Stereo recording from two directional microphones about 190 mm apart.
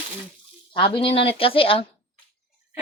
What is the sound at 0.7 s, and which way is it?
Speech, 25° left (ahead or behind).